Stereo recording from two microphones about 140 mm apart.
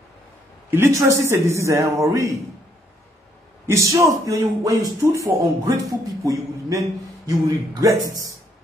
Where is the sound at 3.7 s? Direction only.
20° right (ahead or behind).